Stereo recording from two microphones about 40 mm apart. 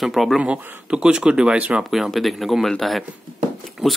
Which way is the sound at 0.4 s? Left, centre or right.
Right.